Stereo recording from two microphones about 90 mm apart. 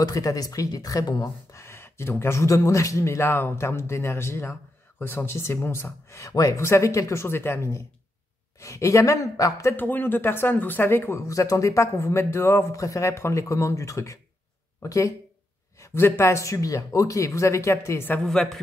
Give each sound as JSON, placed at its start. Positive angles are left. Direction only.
{"t": 0.0, "sound": "speech", "side_deg": 40}
{"t": 9.8, "sound": "speech", "side_deg": 20}
{"t": 12.7, "sound": "speech", "side_deg": 40}
{"t": 18.2, "sound": "a woman's voice", "side_deg": 5}